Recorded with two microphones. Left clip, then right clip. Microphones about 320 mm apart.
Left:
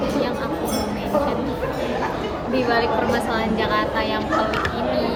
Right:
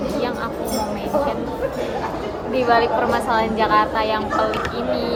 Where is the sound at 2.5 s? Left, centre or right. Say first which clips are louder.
Right 3 dB; centre.